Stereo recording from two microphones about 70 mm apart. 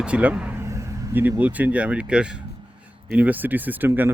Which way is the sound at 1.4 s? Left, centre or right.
Right.